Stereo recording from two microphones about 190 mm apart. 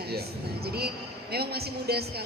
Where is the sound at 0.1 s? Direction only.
55° right (ahead or behind).